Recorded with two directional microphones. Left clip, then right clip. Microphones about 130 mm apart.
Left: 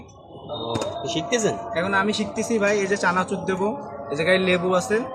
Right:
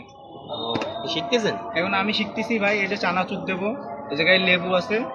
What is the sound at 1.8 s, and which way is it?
A man's voice, 40° left (ahead or behind).